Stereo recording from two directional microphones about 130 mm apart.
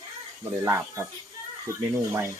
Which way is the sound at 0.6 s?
20° right (ahead or behind).